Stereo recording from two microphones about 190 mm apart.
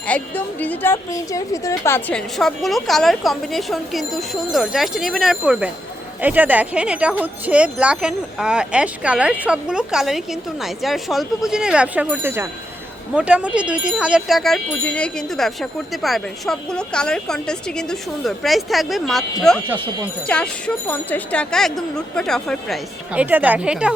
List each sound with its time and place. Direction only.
0.1 s speech: 10° left (ahead or behind)